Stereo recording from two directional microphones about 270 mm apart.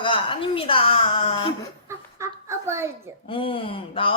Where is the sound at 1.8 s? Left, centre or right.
Centre.